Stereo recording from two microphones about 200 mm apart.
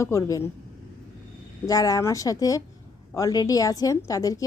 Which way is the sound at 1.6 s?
15° left (ahead or behind).